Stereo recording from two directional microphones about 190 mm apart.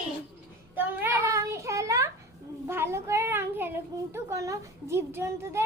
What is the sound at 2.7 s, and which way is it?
Child singing, 15° right (ahead or behind).